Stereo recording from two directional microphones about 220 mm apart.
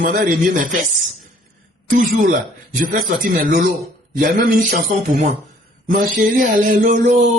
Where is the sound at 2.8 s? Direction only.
40° right (ahead or behind).